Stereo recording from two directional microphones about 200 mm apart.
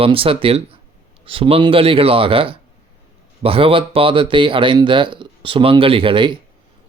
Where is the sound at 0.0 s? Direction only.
25° right (ahead or behind).